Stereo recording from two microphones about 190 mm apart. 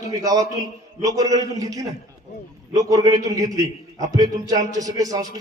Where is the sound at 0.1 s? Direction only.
20° right (ahead or behind).